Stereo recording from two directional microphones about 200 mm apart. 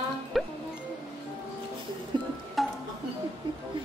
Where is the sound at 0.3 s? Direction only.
Centre (ahead or behind).